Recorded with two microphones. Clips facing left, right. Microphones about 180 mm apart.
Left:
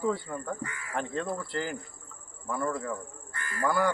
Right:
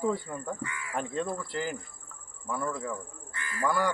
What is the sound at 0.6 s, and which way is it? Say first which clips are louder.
Speech: right 1 dB; 45° left (ahead or behind).